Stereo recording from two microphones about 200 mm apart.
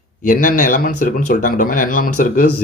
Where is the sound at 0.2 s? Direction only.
45° left (ahead or behind).